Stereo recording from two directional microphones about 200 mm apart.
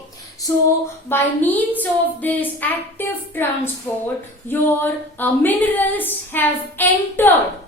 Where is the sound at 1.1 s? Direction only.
10° left (ahead or behind).